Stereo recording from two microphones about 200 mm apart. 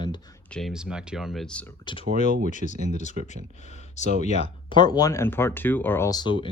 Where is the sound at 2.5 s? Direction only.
35° left (ahead or behind).